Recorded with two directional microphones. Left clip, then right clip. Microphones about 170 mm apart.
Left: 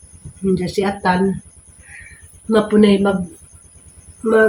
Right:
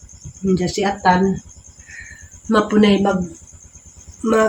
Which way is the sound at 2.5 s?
5° right (ahead or behind).